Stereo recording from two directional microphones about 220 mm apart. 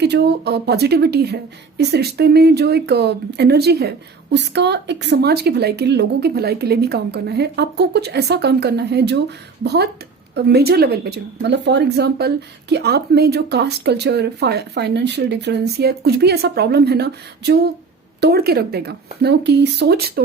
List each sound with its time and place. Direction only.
0.0 s speech: 50° right (ahead or behind)